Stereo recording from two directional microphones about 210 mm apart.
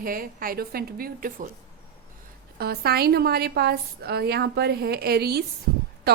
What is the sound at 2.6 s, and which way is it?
A woman's voice, 50° right (ahead or behind).